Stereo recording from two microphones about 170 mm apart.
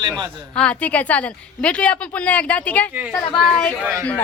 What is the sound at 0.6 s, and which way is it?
A woman's voice, 5° left (ahead or behind).